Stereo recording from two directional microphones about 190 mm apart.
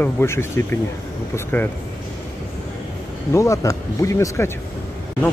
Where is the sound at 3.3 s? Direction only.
15° left (ahead or behind).